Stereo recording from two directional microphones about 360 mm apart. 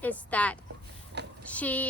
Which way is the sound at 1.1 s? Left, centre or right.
Right.